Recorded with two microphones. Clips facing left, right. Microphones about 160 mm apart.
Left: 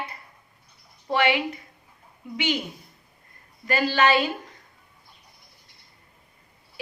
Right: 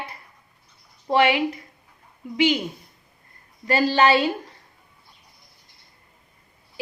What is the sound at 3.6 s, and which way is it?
Speech, 30° right (ahead or behind).